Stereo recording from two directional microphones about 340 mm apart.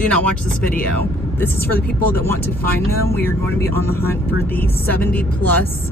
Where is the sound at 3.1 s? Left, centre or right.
Centre.